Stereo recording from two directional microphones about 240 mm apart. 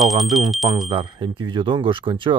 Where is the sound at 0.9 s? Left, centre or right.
Centre.